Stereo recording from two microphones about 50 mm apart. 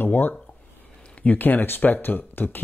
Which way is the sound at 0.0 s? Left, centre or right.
Left.